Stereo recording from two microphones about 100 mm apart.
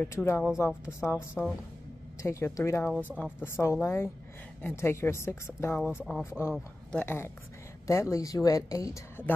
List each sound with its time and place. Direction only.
0.0 s a woman's voice: 25° left (ahead or behind)
6.0 s speech: 5° right (ahead or behind)
6.9 s a woman's voice: 20° left (ahead or behind)
7.8 s speech: 30° left (ahead or behind)